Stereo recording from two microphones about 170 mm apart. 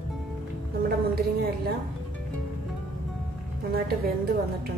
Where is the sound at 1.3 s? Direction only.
65° right (ahead or behind).